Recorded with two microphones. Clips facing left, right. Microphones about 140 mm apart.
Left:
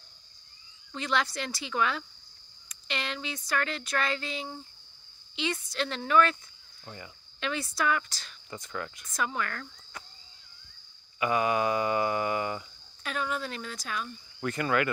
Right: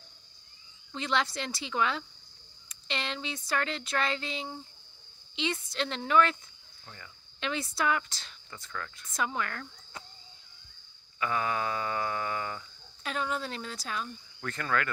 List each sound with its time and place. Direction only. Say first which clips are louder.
0.9 s speech: left 1 dB; 25° right (ahead or behind)
7.3 s speech: left 1 dB; 25° right (ahead or behind)
8.5 s speech: left 4 dB; 15° left (ahead or behind)
9.1 s speech: even; 20° right (ahead or behind)
11.1 s speech: left 4 dB; 15° left (ahead or behind)
13.0 s speech: even; 25° right (ahead or behind)
14.4 s speech: left 4 dB; 10° left (ahead or behind)